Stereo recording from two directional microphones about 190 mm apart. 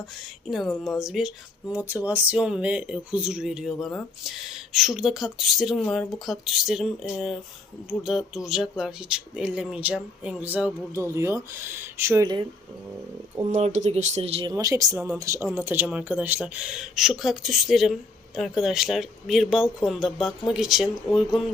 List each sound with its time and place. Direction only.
0.9 s a woman's voice: centre (ahead or behind)
13.5 s speech: 35° right (ahead or behind)
14.5 s a woman's voice: 20° right (ahead or behind); by 21.4 s centre (ahead or behind)